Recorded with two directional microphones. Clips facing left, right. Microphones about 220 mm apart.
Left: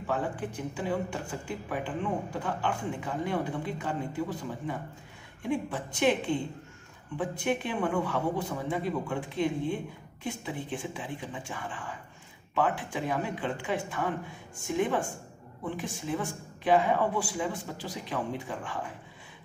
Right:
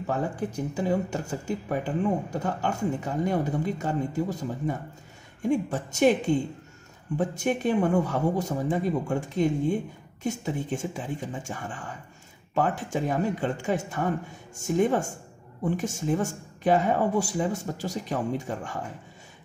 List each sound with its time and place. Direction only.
0.0 s speech: 40° right (ahead or behind)